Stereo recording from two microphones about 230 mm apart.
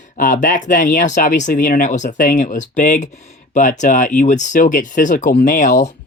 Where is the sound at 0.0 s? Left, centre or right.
Left.